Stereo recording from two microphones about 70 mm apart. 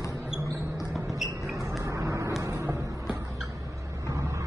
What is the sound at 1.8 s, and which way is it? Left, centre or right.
Vehicle, right.